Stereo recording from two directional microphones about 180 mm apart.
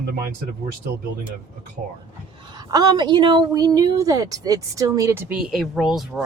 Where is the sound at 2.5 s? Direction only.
20° right (ahead or behind).